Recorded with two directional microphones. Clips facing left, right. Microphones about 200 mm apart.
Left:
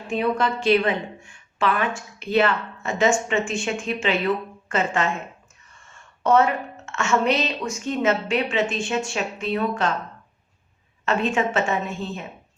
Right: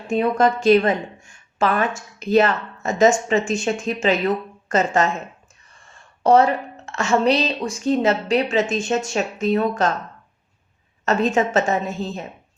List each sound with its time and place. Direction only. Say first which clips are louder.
0.1 s a woman's voice: right 5 dB; 45° right (ahead or behind)
11.0 s a woman's voice: right 3 dB; 40° right (ahead or behind)